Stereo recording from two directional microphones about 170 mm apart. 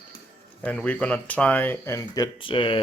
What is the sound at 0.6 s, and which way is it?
Speech, 10° left (ahead or behind).